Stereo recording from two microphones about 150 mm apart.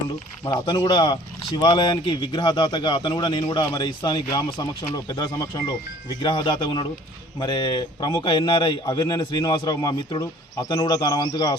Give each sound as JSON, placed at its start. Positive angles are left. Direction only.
{"t": 0.4, "sound": "a man's voice", "side_deg": 30}